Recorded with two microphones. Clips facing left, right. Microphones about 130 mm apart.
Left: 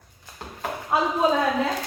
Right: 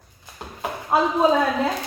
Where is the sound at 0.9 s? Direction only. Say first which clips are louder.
Right 3 dB; 30° right (ahead or behind).